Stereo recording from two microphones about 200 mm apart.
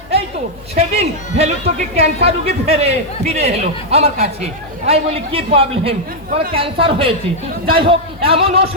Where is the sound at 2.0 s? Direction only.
30° right (ahead or behind).